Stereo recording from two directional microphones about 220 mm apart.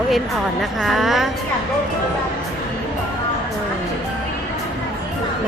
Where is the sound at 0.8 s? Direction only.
Centre (ahead or behind).